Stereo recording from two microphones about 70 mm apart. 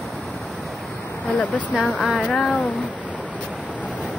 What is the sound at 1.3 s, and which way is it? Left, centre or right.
Speech, left.